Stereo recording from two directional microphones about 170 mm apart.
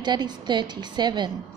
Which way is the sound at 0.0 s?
25° right (ahead or behind).